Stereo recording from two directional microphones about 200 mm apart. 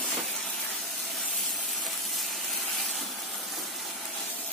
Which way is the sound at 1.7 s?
Centre (ahead or behind).